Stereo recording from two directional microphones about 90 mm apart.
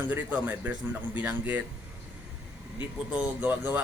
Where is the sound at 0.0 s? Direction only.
15° right (ahead or behind).